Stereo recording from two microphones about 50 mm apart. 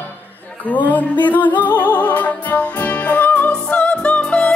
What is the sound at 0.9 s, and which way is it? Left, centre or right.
Music, left.